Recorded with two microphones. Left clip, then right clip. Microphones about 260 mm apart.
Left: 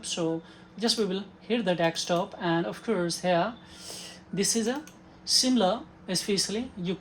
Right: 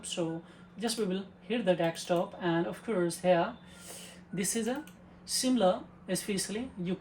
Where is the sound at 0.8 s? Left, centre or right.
Left.